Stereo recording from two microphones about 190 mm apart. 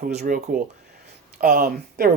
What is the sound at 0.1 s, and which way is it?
Speech, 40° right (ahead or behind).